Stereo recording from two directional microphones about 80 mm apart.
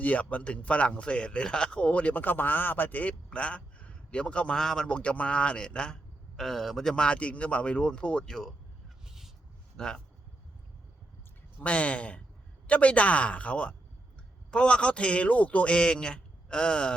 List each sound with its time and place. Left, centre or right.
0.0 s speech: centre
9.0 s a sound: centre
9.7 s speech: centre
11.6 s speech: centre